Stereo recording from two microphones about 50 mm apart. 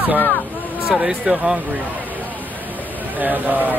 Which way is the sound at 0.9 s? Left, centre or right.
Centre.